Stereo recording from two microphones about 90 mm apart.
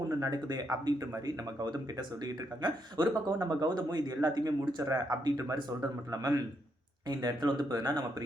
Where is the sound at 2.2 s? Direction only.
50° right (ahead or behind).